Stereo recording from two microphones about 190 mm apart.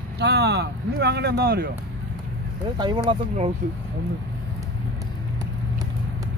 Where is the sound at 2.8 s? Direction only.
20° right (ahead or behind).